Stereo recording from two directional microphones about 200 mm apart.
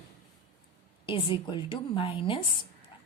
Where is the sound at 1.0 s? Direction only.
25° left (ahead or behind).